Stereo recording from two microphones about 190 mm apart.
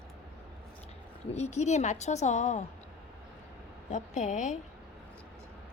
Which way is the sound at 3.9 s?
40° left (ahead or behind).